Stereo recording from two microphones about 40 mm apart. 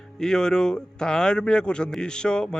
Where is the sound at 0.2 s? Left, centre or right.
Centre.